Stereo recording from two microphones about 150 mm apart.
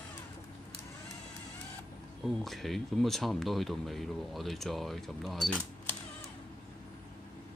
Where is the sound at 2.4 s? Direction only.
Centre (ahead or behind).